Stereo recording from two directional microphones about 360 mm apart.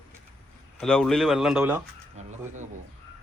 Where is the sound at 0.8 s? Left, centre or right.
Centre.